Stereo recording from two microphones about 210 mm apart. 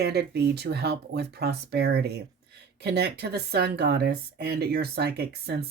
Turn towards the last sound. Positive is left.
turn(degrees=-50)  # may be behind; listen again after turning